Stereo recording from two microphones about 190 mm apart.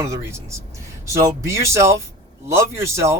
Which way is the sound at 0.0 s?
15° right (ahead or behind).